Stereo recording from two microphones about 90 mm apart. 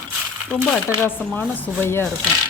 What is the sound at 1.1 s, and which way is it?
A woman's voice, 25° left (ahead or behind).